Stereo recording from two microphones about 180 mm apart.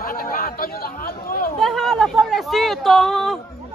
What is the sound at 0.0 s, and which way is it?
Chatter, 50° left (ahead or behind).